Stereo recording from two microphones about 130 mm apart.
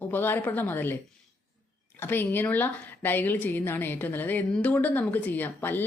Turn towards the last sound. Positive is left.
turn(degrees=15)  # may be behind; listen again after turning